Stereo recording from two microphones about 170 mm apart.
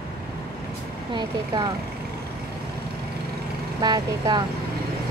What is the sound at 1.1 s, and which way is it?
Speech, 25° right (ahead or behind).